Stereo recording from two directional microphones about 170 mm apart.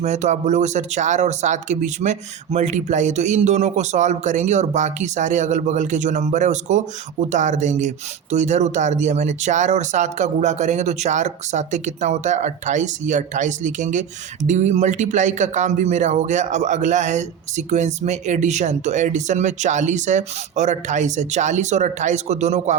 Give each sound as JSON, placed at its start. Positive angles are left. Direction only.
{"t": 0.0, "sound": "speech", "side_deg": -45}